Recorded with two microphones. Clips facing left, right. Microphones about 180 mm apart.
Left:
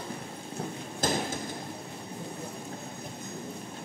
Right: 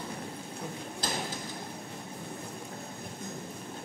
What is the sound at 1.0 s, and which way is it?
Hammer, 50° left (ahead or behind).